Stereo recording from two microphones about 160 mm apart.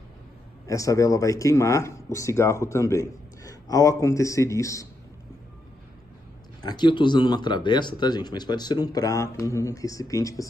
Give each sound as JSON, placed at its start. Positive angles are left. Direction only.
{"t": 0.7, "sound": "speech", "side_deg": 20}
{"t": 6.6, "sound": "speech", "side_deg": 25}